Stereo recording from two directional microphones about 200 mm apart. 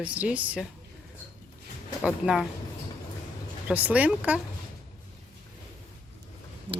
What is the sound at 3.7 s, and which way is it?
Speech, 5° right (ahead or behind).